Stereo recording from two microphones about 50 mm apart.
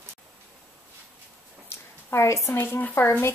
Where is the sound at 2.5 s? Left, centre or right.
Left.